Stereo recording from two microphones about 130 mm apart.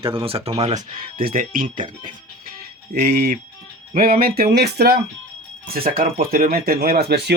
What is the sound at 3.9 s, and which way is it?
Speech, 90° right.